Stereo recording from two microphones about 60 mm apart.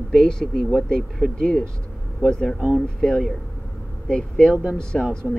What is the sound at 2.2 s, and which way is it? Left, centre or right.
Speech, centre.